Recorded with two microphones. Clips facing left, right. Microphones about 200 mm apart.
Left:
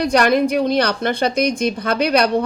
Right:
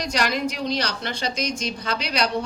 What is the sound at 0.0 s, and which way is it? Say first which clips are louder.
Speech: left 9 dB; 55° left (ahead or behind).